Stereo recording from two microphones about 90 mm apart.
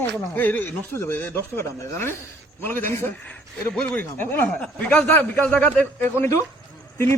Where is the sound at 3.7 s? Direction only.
10° left (ahead or behind).